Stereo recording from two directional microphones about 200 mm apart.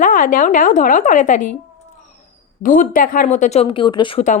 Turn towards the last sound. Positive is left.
turn(degrees=25)  # may be behind; listen again after turning